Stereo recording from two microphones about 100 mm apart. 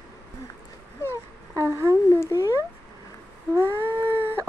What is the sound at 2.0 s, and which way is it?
Cat, 30° left (ahead or behind).